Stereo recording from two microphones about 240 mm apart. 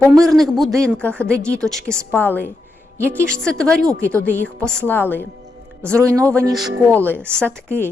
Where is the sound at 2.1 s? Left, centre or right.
Centre.